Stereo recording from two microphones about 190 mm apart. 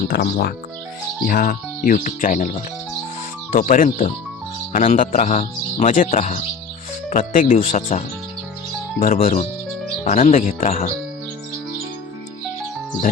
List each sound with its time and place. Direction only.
0.1 s speech: 50° left (ahead or behind)
3.5 s speech: 40° left (ahead or behind)
7.4 s speech: 35° left (ahead or behind)